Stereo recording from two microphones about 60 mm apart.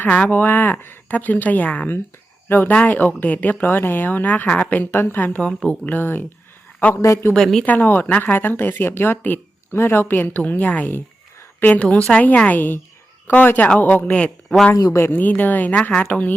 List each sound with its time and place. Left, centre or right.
0.0 s speech: left
2.5 s speech: left
4.9 s speech: left
5.6 s speech: left
6.0 s speech: left
6.9 s a man's voice: left
7.3 s speech: centre
7.6 s speech: left
14.0 s speech: left
14.3 s speech: centre
14.9 s speech: left
15.2 s speech: left